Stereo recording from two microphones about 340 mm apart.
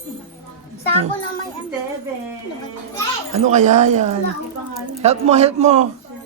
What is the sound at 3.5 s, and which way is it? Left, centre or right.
A man's voice, right.